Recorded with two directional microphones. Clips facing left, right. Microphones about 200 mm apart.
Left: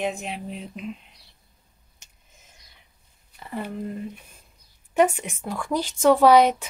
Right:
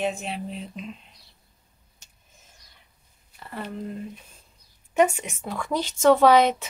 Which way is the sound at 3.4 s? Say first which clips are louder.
Left 3 dB; 15° left (ahead or behind).